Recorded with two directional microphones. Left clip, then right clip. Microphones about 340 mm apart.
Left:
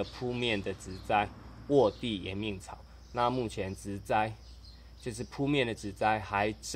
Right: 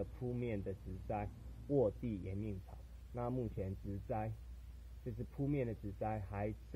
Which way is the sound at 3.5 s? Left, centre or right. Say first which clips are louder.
Left 9 dB; centre.